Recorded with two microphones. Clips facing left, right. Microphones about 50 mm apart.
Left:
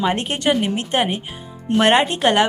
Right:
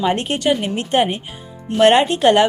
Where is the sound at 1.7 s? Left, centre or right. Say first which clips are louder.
Right 3 dB; centre.